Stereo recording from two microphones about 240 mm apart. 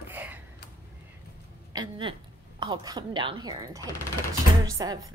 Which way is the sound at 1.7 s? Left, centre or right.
Centre.